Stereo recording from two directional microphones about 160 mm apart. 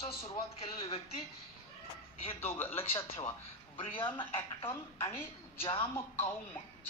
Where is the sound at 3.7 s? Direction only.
35° left (ahead or behind).